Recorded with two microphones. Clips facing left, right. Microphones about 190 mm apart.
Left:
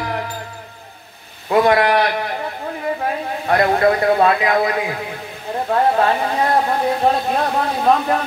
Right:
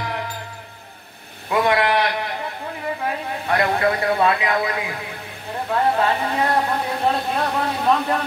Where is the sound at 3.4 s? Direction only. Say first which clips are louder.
Left 5 dB; 40° left (ahead or behind).